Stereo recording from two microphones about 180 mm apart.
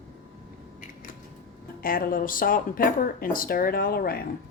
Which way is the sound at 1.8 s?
50° left (ahead or behind).